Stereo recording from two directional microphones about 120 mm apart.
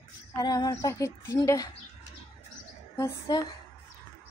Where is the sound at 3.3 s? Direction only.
35° left (ahead or behind).